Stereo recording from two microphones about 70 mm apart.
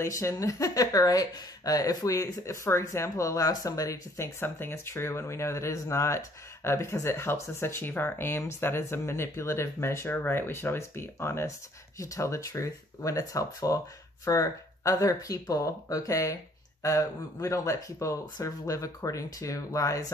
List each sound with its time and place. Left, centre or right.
0.0 s speech: left
4.4 s speech: left